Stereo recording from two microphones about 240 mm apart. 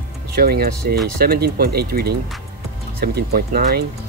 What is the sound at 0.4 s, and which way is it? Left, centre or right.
Speech, right.